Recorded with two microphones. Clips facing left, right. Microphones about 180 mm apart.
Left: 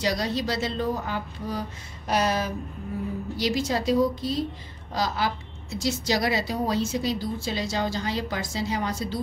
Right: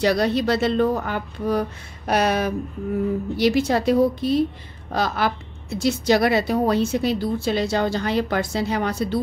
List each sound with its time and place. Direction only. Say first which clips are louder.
0.0 s a woman's voice: right 7 dB; 60° right (ahead or behind)